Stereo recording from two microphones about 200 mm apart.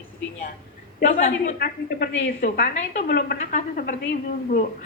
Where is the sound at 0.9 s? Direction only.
45° left (ahead or behind).